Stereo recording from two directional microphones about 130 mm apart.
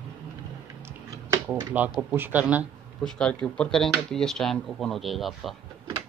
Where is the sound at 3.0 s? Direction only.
5° left (ahead or behind).